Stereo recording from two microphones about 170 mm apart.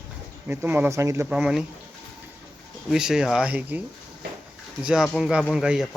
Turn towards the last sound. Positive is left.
turn(degrees=-5)  # may be behind; listen again after turning